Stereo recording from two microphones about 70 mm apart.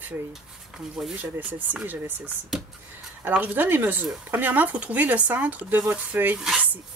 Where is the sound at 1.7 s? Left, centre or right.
Right.